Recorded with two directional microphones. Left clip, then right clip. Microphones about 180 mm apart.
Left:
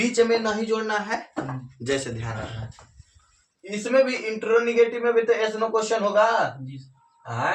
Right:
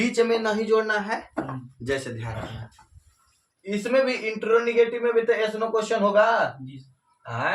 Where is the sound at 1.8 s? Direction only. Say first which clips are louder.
Left 2 dB; 15° left (ahead or behind).